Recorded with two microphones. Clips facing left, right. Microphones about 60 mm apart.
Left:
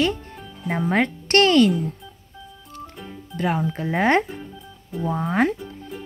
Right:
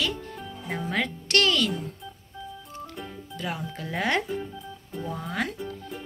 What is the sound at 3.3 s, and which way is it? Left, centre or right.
Speech, left.